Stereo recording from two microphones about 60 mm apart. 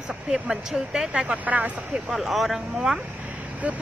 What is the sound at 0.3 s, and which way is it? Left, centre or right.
Speech, centre.